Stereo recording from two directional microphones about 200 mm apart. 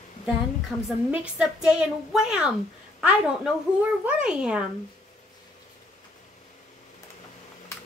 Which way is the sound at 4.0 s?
5° right (ahead or behind).